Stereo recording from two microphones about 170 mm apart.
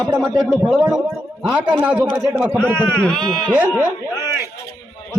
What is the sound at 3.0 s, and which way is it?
Speech, 5° left (ahead or behind).